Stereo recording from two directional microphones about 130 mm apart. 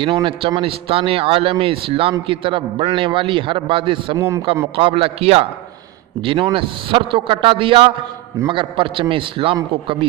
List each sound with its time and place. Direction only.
0.0 s a man's voice: 40° right (ahead or behind)